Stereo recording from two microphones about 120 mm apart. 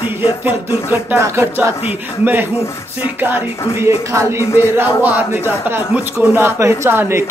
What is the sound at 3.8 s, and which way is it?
Speech, 20° right (ahead or behind).